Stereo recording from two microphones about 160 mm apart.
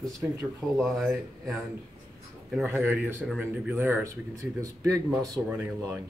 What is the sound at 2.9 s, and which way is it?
Speech, 15° right (ahead or behind).